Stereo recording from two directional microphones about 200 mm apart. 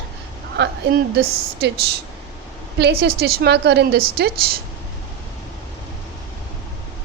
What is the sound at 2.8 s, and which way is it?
A woman's voice, 55° right (ahead or behind).